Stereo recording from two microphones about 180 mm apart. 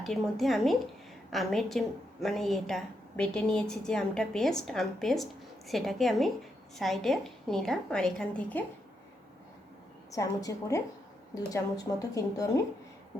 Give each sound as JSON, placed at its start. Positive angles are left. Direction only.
{"t": 0.0, "sound": "a woman's voice", "side_deg": 0}
{"t": 10.1, "sound": "a woman's voice", "side_deg": 20}